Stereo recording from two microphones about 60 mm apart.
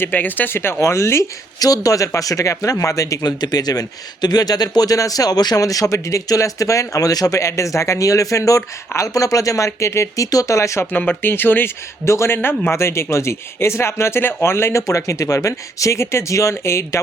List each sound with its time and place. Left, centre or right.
0.0 s a man's voice: left
1.5 s speech: left
11.2 s speech: left
12.0 s a man's voice: left